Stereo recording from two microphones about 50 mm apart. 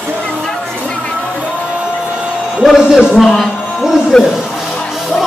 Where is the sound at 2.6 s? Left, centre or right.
Centre.